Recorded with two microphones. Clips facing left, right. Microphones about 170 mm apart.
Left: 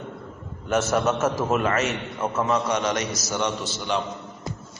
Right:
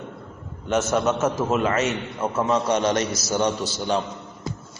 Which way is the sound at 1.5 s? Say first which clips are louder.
Right 1 dB; 25° right (ahead or behind).